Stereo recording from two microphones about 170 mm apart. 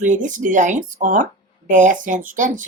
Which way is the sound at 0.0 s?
50° right (ahead or behind).